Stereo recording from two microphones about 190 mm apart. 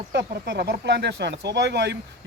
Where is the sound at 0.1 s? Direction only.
65° right (ahead or behind).